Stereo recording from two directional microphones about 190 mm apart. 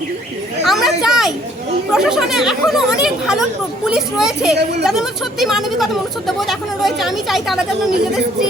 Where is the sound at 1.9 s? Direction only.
Centre (ahead or behind).